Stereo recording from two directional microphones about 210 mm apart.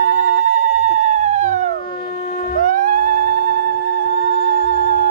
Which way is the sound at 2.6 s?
40° right (ahead or behind).